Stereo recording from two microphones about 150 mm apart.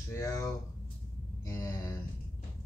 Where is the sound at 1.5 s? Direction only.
20° left (ahead or behind).